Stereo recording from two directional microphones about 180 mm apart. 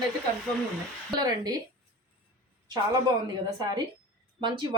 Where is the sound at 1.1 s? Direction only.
20° right (ahead or behind).